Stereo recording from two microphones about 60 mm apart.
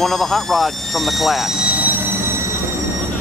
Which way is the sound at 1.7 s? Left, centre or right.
Right.